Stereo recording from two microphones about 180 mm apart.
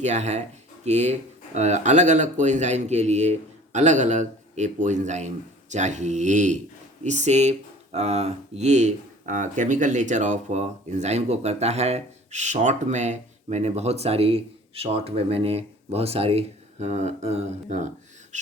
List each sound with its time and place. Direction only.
0.0 s speech: 40° right (ahead or behind)